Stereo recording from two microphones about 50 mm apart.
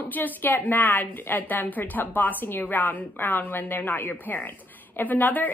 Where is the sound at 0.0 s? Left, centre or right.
Left.